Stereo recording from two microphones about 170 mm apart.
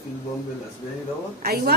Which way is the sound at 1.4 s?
65° right (ahead or behind).